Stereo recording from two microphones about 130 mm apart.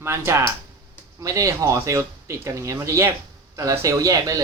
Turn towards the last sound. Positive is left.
turn(degrees=-30)  # may be behind; listen again after turning